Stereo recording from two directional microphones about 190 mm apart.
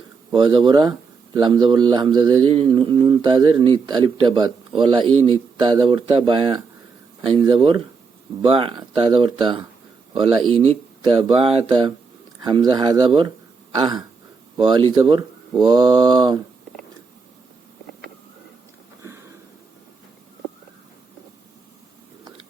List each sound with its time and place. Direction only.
0.3 s a man's voice: 25° right (ahead or behind)
11.0 s a man's voice: 25° right (ahead or behind)